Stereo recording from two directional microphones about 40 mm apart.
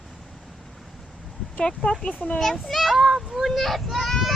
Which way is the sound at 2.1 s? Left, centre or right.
Left.